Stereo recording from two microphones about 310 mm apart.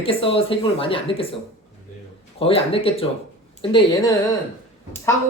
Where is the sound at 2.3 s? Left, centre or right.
Centre.